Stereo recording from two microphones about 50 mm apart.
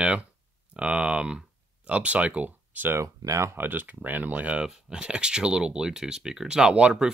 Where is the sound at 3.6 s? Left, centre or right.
Right.